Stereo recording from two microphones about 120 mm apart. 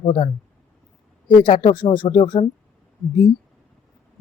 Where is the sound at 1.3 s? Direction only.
45° left (ahead or behind).